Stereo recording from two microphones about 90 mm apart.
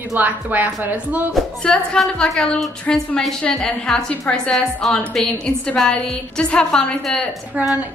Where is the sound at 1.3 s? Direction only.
10° left (ahead or behind).